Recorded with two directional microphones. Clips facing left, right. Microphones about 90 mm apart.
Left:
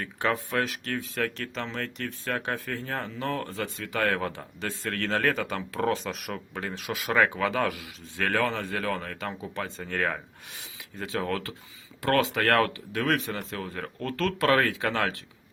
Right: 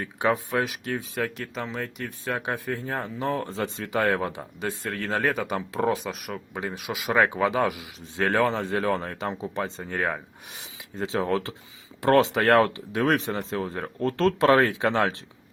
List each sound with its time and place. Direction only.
0.0 s speech: 15° right (ahead or behind)
6.1 s speech: centre (ahead or behind)
6.5 s a man's voice: 15° right (ahead or behind)